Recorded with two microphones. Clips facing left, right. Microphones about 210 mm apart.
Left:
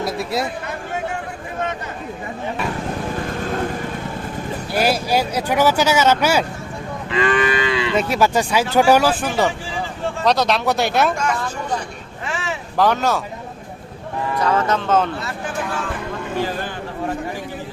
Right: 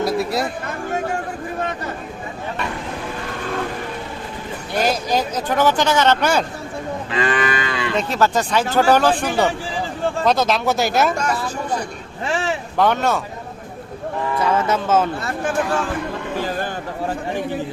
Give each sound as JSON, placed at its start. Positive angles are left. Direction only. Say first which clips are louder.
{"t": 0.0, "sound": "a sound", "louder": "right 3 dB", "side_deg": 0}
{"t": 4.7, "sound": "speech", "louder": "left 1 dB", "side_deg": 10}
{"t": 7.2, "sound": "moo", "louder": "left 3 dB", "side_deg": -40}
{"t": 7.9, "sound": "speech", "louder": "even", "side_deg": 10}
{"t": 12.3, "sound": "vehicle", "louder": "right 5 dB", "side_deg": -35}
{"t": 12.7, "sound": "speech", "louder": "left 1 dB", "side_deg": 0}
{"t": 14.4, "sound": "speech", "louder": "even", "side_deg": -5}